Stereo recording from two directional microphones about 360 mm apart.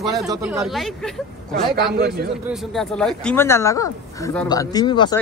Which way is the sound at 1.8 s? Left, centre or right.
Right.